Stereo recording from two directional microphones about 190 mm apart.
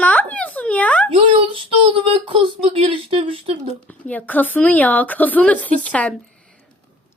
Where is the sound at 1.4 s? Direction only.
30° right (ahead or behind).